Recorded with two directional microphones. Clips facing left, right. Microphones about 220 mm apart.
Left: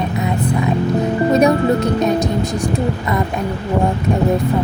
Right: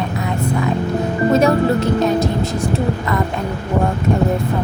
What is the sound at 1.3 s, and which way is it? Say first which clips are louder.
A woman's voice: left 1 dB; 15° left (ahead or behind).